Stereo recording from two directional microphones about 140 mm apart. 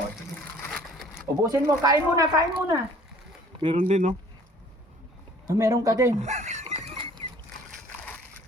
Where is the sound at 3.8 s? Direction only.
60° right (ahead or behind).